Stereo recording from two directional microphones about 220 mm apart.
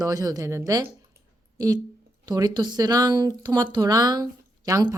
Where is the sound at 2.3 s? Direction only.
20° right (ahead or behind).